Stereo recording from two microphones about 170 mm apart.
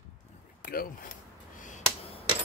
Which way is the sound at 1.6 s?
45° left (ahead or behind).